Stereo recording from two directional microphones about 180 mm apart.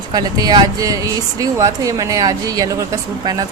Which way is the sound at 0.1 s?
20° right (ahead or behind).